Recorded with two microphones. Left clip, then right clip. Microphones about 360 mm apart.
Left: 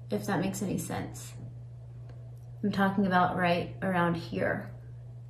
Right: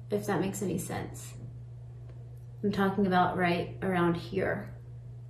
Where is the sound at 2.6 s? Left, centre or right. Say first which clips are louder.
Even; centre.